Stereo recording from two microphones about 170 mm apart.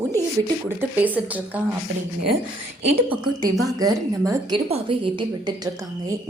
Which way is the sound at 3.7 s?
20° right (ahead or behind).